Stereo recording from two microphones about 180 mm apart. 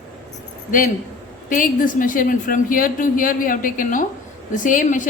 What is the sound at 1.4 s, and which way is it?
A woman's voice, 50° left (ahead or behind).